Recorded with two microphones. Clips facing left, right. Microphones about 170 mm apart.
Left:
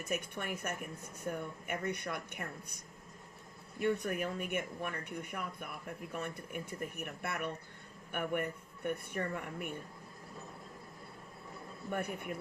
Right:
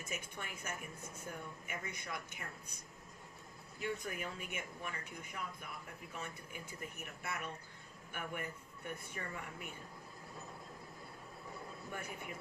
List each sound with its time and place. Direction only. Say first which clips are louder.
0.1 s speech: left 10 dB; 60° left (ahead or behind)
3.8 s speech: left 8 dB; 60° left (ahead or behind)
11.9 s speech: left 10 dB; 60° left (ahead or behind)